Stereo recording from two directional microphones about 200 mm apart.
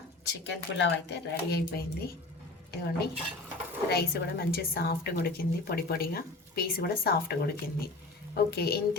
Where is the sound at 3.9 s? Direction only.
50° left (ahead or behind).